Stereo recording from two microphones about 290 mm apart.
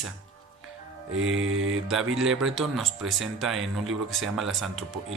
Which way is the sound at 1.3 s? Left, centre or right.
Right.